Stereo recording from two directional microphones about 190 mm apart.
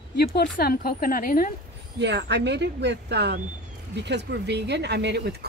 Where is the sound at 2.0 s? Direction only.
65° right (ahead or behind).